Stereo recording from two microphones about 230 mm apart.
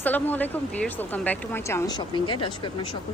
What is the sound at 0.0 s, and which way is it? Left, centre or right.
Speech, centre.